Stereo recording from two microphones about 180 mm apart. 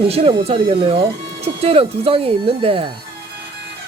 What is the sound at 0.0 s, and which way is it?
Speech, 30° right (ahead or behind).